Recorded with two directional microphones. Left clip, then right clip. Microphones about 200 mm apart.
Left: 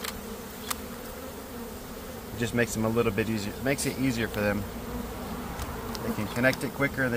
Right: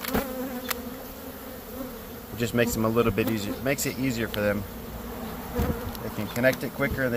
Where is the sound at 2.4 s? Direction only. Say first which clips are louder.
Right 3 dB; 35° right (ahead or behind).